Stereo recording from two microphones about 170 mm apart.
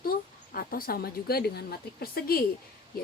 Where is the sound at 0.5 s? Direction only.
60° left (ahead or behind).